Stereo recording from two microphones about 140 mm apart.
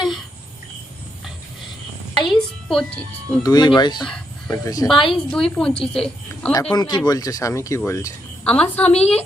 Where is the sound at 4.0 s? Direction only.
5° left (ahead or behind).